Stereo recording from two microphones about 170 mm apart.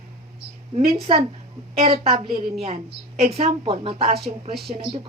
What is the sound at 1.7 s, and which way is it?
A woman's voice, 35° right (ahead or behind).